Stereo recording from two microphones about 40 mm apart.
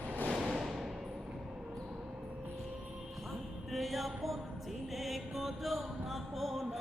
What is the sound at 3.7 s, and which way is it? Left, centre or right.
Music, centre.